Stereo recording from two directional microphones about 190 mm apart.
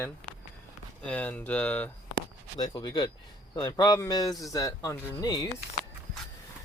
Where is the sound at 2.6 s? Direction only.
20° left (ahead or behind).